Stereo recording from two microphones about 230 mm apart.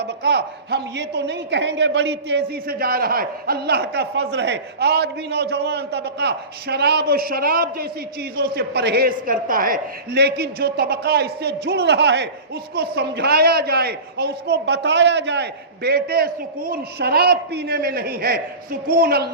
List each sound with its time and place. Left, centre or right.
0.0 s a woman's voice: right